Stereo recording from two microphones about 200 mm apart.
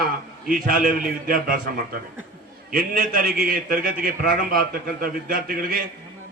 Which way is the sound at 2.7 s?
45° right (ahead or behind).